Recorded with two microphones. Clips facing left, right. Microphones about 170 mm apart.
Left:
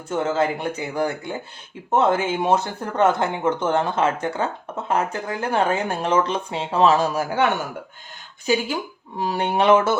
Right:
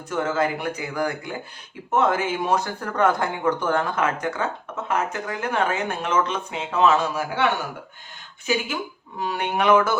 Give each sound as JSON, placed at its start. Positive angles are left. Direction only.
{"t": 0.1, "sound": "speech", "side_deg": 25}
{"t": 8.4, "sound": "speech", "side_deg": 35}